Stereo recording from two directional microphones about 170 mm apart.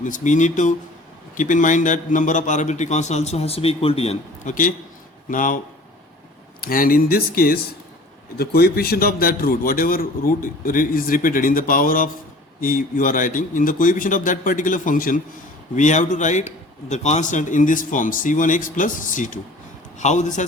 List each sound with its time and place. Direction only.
0.0 s a man's voice: 45° left (ahead or behind)
4.4 s a man's voice: 50° left (ahead or behind)
6.6 s a man's voice: 60° left (ahead or behind)